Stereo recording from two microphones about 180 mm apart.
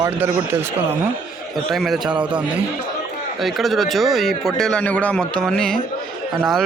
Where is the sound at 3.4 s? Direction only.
Centre (ahead or behind).